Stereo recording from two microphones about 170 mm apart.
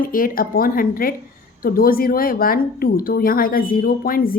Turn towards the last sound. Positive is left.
turn(degrees=55)  # may be behind; listen again after turning